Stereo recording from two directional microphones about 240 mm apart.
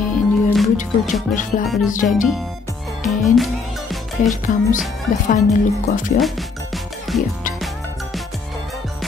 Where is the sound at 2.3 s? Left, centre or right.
Centre.